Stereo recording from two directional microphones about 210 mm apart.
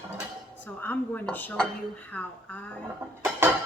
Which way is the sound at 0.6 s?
10° left (ahead or behind).